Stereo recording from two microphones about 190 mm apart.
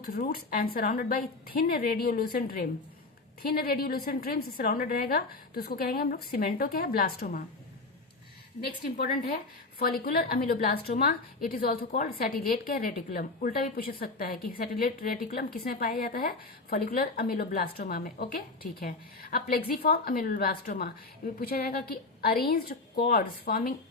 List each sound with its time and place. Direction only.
0.0 s a woman's voice: 50° left (ahead or behind)
8.6 s a woman's voice: 55° left (ahead or behind)